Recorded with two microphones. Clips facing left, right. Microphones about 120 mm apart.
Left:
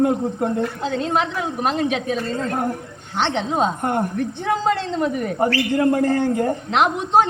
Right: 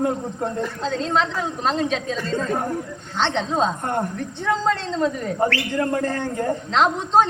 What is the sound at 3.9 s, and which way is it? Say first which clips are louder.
Speech: left 3 dB; 60° left (ahead or behind).